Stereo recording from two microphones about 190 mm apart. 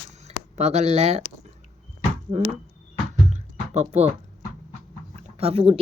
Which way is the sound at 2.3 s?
35° right (ahead or behind).